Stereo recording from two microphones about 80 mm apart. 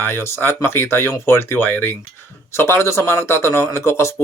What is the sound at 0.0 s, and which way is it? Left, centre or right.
Speech, left.